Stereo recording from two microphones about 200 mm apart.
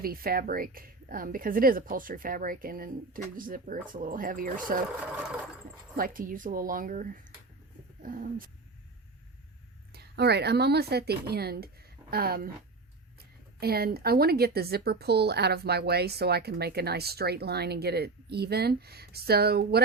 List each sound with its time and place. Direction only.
0.0 s a woman's voice: 50° right (ahead or behind)
6.0 s a woman's voice: 40° right (ahead or behind)
9.9 s a woman's voice: 55° right (ahead or behind)